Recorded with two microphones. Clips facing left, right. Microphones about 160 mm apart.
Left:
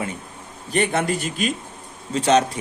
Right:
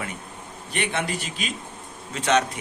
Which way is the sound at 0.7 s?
40° left (ahead or behind).